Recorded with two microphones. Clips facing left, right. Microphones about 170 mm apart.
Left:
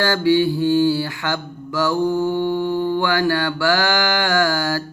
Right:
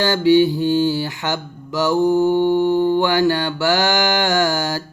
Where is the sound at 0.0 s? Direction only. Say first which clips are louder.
Right 3 dB; 20° right (ahead or behind).